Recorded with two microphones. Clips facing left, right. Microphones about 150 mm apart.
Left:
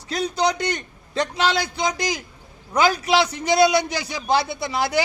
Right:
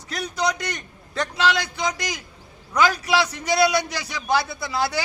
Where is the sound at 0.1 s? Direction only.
25° left (ahead or behind).